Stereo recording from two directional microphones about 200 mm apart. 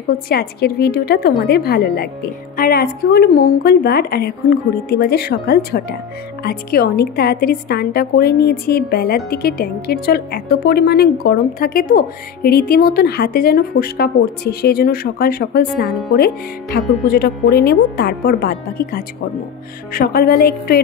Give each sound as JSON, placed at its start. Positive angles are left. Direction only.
{"t": 0.3, "sound": "a woman's voice", "side_deg": 50}
{"t": 17.1, "sound": "a woman's voice", "side_deg": 50}